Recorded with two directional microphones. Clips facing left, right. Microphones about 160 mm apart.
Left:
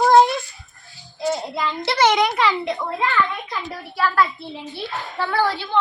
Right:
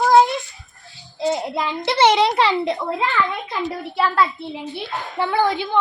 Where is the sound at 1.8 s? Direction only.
20° right (ahead or behind).